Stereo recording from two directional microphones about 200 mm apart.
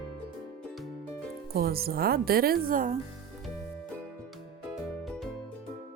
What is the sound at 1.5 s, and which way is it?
Speech, 50° right (ahead or behind).